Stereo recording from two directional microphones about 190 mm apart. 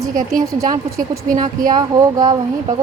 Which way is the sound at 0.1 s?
45° right (ahead or behind).